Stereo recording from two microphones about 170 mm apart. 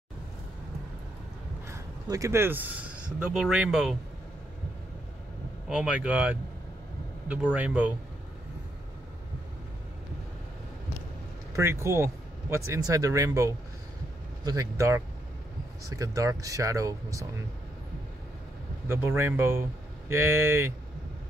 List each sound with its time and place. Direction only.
1.7 s speech: 20° right (ahead or behind)
5.7 s speech: 5° right (ahead or behind)
7.5 s speech: 10° right (ahead or behind)
11.5 s speech: 15° right (ahead or behind)
18.9 s speech: 15° right (ahead or behind)